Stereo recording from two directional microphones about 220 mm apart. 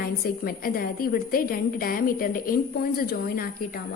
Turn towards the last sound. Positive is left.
turn(degrees=40)  # may be behind; listen again after turning